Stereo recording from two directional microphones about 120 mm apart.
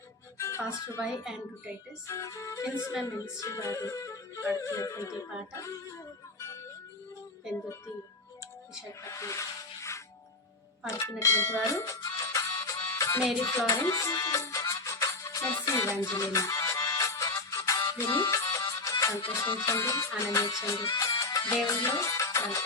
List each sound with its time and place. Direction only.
0.3 s music: 25° left (ahead or behind)
2.0 s music: 25° left (ahead or behind)
8.9 s music: 25° left (ahead or behind)
11.2 s music: 25° left (ahead or behind)